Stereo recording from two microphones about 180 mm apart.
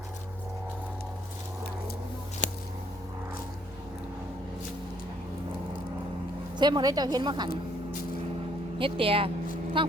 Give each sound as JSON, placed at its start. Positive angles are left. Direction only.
{"t": 2.4, "sound": "a sound", "side_deg": 45}
{"t": 6.6, "sound": "a woman's voice", "side_deg": -25}
{"t": 8.8, "sound": "speech", "side_deg": -30}